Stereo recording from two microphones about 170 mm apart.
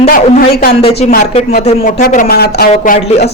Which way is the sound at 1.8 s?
55° left (ahead or behind).